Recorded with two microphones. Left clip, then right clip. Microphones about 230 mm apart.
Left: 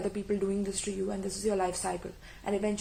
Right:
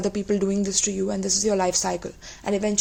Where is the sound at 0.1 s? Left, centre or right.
Right.